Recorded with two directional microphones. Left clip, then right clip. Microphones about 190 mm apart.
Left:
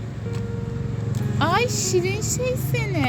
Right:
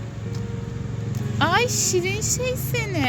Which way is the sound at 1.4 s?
5° right (ahead or behind).